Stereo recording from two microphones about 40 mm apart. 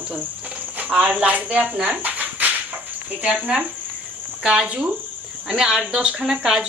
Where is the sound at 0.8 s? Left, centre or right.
Right.